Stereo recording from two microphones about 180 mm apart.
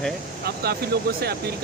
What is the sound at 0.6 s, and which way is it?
Speech, 60° right (ahead or behind).